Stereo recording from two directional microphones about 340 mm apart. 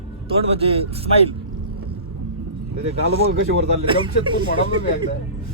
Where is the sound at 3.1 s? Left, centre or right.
Centre.